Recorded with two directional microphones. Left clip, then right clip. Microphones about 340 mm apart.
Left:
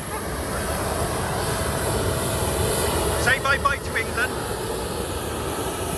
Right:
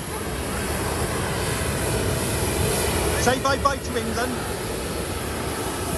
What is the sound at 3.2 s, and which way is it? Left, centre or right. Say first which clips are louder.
Speech: left 1 dB; centre.